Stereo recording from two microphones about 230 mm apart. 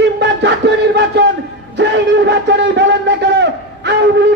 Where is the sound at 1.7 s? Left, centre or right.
Right.